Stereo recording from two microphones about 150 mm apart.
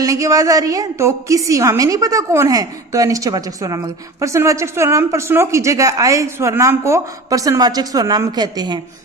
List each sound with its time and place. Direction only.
0.0 s speech: 20° right (ahead or behind)